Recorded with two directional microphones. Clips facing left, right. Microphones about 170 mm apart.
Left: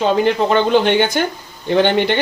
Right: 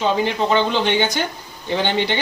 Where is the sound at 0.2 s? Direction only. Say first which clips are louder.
Left 4 dB; 50° left (ahead or behind).